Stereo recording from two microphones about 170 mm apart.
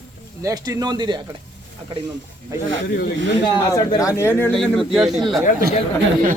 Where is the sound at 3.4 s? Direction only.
20° left (ahead or behind).